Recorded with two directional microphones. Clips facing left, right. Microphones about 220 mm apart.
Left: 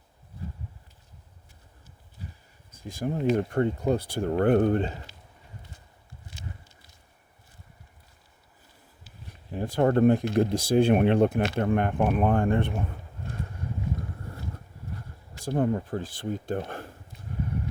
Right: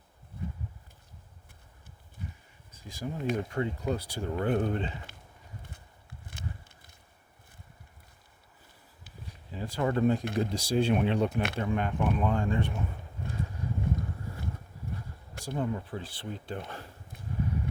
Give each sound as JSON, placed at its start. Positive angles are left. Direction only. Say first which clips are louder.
{"t": 2.7, "sound": "speech", "louder": "left 7 dB", "side_deg": 55}
{"t": 5.6, "sound": "a sound", "louder": "right 1 dB", "side_deg": -55}
{"t": 9.5, "sound": "speech", "louder": "left 7 dB", "side_deg": 55}
{"t": 15.4, "sound": "speech", "louder": "left 7 dB", "side_deg": 50}